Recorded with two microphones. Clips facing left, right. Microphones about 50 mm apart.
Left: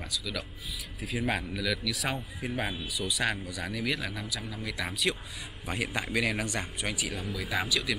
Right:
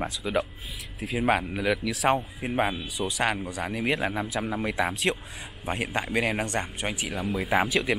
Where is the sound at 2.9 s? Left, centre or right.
Right.